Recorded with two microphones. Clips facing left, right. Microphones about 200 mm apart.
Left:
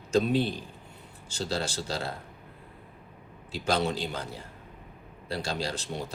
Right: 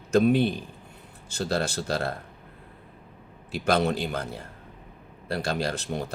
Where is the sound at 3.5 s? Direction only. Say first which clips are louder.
Right 4 dB; 60° right (ahead or behind).